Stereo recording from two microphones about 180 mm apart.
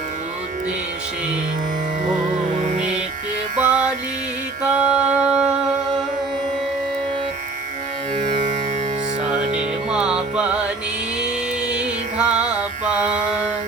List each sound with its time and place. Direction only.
3.7 s music: 5° right (ahead or behind)
8.1 s music: 45° right (ahead or behind)
9.9 s music: 5° right (ahead or behind)
11.7 s music: 5° right (ahead or behind)